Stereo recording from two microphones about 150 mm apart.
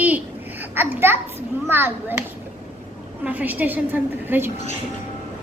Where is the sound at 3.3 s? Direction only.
10° right (ahead or behind).